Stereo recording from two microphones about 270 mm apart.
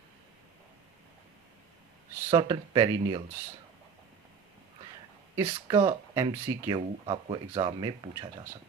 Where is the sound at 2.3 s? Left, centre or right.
Centre.